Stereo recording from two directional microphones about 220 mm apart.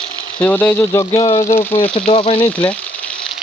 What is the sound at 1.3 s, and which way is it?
Speech, 30° left (ahead or behind).